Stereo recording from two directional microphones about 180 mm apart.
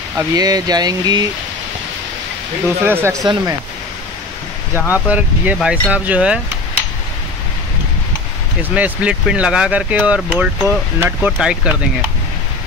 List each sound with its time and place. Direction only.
0.2 s speech: 20° right (ahead or behind)
2.8 s speech: 10° right (ahead or behind)
4.7 s speech: 15° left (ahead or behind)
5.0 s speech: 10° right (ahead or behind)
8.7 s speech: 5° right (ahead or behind)